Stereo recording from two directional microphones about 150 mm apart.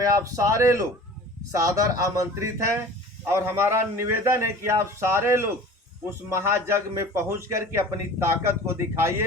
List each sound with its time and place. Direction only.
0.0 s a man's voice: 20° right (ahead or behind)